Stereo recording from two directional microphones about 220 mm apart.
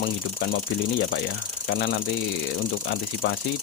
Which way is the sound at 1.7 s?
55° left (ahead or behind).